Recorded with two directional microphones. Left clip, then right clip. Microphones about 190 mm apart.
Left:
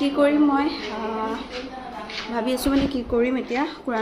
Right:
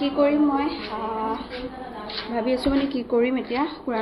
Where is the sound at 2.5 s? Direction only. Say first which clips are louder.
Even; 30° left (ahead or behind).